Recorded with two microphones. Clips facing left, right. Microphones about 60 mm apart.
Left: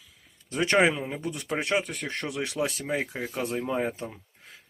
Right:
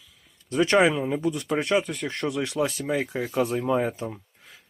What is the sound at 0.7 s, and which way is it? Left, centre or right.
Speech, centre.